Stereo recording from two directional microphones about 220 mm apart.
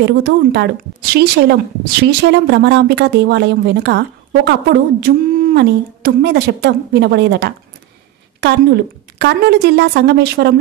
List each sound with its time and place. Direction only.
0.0 s speech: 50° right (ahead or behind)